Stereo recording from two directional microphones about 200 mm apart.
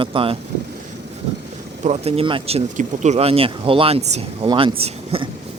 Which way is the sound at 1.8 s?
30° right (ahead or behind).